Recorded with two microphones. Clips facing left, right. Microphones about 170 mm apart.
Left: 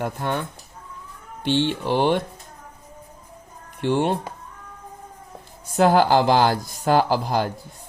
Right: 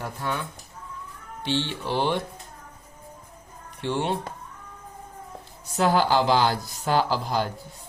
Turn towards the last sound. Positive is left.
turn(degrees=50)  # may be behind; listen again after turning